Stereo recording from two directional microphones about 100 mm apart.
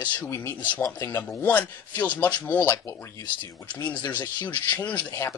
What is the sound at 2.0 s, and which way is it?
Speech, 15° left (ahead or behind).